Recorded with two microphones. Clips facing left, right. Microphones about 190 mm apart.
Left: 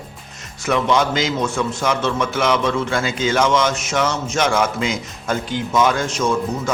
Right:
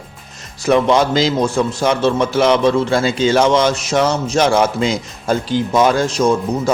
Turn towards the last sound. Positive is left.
turn(degrees=-35)  # may be behind; listen again after turning